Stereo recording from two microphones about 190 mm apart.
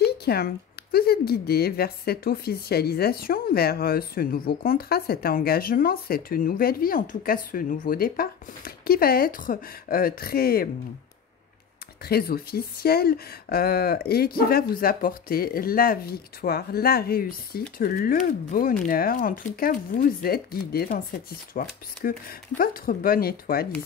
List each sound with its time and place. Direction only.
0.0 s a sound: 55° left (ahead or behind)
0.9 s speech: 55° left (ahead or behind)
12.0 s speech: 55° left (ahead or behind)